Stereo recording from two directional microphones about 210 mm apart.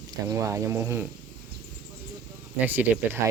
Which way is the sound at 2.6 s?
10° right (ahead or behind).